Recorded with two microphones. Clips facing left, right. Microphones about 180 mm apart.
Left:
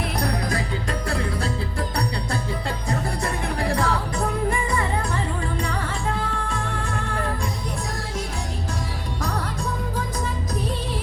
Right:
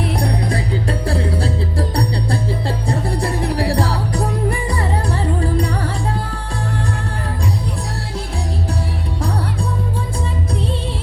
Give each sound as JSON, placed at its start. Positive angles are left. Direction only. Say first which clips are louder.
{"t": 0.2, "sound": "music", "louder": "right 4 dB", "side_deg": -30}